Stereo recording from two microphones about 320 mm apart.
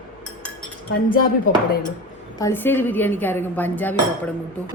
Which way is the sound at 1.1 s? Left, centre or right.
Left.